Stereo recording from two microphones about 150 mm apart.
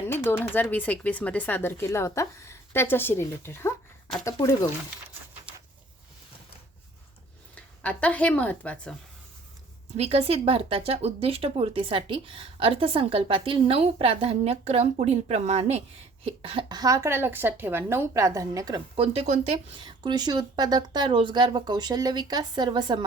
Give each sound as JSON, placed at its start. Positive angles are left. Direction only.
{"t": 0.1, "sound": "speech", "side_deg": 15}
{"t": 7.5, "sound": "speech", "side_deg": 10}
{"t": 10.0, "sound": "speech", "side_deg": -45}
{"t": 18.9, "sound": "speech", "side_deg": -40}
{"t": 19.8, "sound": "speech", "side_deg": -30}